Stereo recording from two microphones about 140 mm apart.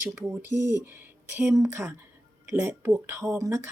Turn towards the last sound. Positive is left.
turn(degrees=-20)  # may be behind; listen again after turning